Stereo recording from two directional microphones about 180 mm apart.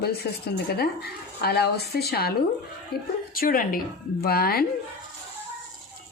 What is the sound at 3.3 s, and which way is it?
A woman's voice, 50° left (ahead or behind).